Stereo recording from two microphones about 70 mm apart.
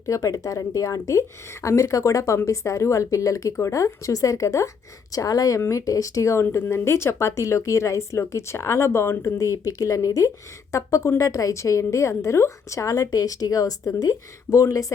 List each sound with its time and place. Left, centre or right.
0.0 s a woman's voice: left
5.5 s speech: left
5.8 s a woman's voice: left
9.4 s a woman's voice: left